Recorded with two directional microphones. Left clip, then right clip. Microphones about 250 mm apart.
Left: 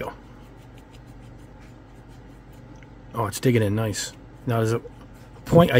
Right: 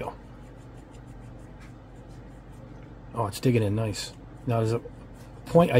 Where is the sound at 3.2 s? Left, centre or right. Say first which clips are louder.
Left 3 dB; left.